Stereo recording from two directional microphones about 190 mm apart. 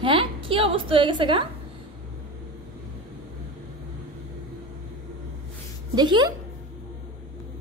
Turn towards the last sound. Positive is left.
turn(degrees=-20)  # may be behind; listen again after turning